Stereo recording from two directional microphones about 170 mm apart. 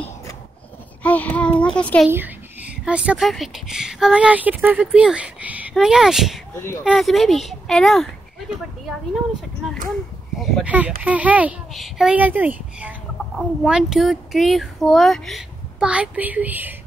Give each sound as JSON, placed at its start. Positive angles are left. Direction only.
{"t": 1.0, "sound": "a child's voice", "side_deg": 10}
{"t": 2.0, "sound": "speech", "side_deg": -10}
{"t": 10.4, "sound": "speech", "side_deg": -10}